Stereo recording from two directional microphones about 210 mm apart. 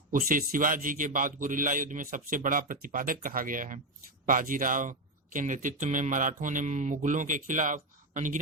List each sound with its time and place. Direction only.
0.1 s speech: 40° right (ahead or behind)